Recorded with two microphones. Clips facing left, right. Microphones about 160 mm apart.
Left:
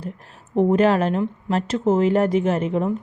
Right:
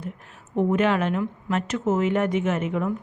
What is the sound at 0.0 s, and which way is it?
Speech, 35° left (ahead or behind).